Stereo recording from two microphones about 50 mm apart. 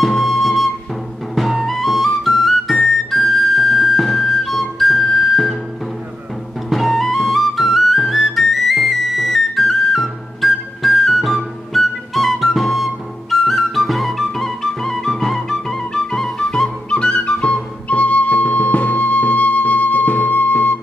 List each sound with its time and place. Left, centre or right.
0.0 s flute: centre
1.3 s music: centre
6.7 s music: centre; by 20.7 s left